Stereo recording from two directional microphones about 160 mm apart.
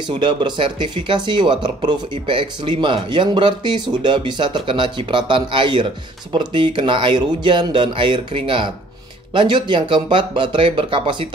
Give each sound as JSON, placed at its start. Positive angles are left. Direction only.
{"t": 0.1, "sound": "speech", "side_deg": -30}